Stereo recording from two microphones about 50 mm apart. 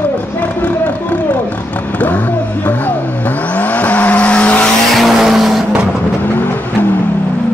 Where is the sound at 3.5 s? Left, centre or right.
Left.